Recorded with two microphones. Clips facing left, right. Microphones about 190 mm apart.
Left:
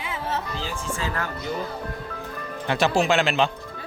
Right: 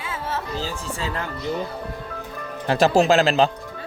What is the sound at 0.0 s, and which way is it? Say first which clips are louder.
Music: even; 20° left (ahead or behind).